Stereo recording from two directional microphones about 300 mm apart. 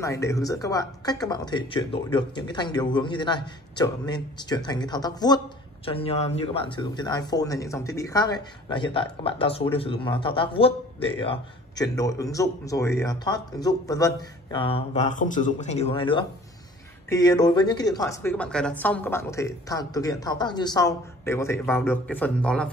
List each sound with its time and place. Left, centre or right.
0.0 s speech: centre